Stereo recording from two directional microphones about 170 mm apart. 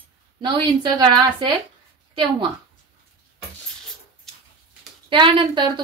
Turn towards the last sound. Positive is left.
turn(degrees=-30)  # may be behind; listen again after turning